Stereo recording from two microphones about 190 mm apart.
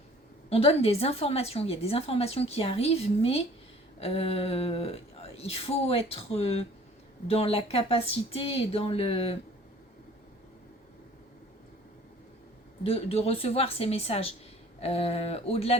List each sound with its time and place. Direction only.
0.5 s a woman's voice: 30° left (ahead or behind)
12.8 s a woman's voice: 30° left (ahead or behind)